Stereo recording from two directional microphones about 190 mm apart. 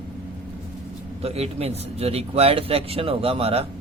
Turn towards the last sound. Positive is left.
turn(degrees=-30)  # may be behind; listen again after turning